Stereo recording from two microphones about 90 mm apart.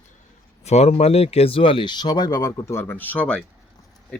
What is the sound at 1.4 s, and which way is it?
Speech, 90° left.